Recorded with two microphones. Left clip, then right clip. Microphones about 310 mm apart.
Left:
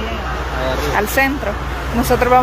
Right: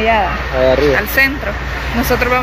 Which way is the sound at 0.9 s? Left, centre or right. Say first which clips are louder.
Right 3 dB; centre.